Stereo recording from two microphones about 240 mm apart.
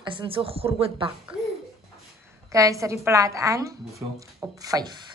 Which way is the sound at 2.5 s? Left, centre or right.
Centre.